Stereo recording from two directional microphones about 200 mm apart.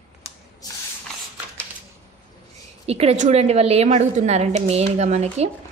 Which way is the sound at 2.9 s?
30° right (ahead or behind).